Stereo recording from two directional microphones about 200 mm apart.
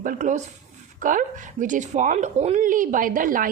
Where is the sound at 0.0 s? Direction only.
40° right (ahead or behind).